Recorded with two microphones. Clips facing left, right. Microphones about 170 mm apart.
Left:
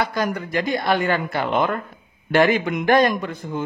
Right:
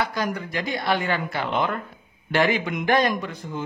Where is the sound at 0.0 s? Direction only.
50° left (ahead or behind).